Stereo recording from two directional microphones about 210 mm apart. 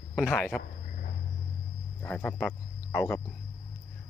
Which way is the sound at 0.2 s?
5° left (ahead or behind).